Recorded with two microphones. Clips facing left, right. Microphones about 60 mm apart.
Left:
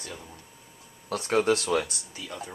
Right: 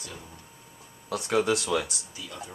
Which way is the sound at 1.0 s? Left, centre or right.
Left.